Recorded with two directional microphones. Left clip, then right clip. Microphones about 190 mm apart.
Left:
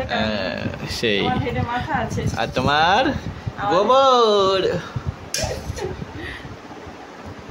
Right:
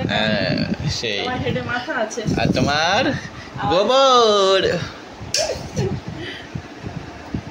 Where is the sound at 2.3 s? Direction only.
20° left (ahead or behind); by 4.7 s centre (ahead or behind).